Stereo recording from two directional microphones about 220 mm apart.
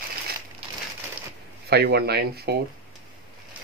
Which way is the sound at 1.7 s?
45° right (ahead or behind).